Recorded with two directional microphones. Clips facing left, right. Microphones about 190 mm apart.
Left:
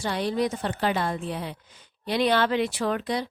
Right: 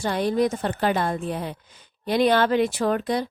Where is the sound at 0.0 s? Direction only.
50° right (ahead or behind).